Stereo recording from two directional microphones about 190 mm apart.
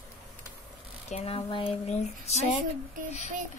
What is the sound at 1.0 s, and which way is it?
Speech, 35° left (ahead or behind).